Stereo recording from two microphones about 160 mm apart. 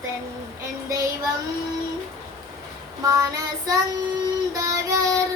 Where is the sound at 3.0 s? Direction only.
20° right (ahead or behind).